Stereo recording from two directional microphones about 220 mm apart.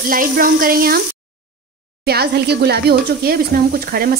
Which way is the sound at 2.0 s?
45° right (ahead or behind).